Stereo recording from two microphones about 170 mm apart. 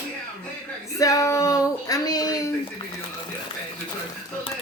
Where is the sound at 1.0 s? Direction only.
20° left (ahead or behind).